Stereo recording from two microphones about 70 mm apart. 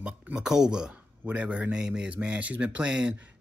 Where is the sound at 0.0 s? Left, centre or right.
Centre.